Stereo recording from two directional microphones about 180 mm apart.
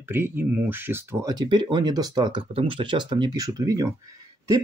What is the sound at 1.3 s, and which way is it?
Speech, 25° right (ahead or behind).